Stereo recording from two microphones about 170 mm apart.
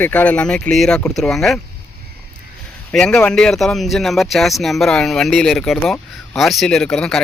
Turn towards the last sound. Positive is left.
turn(degrees=5)  # may be behind; listen again after turning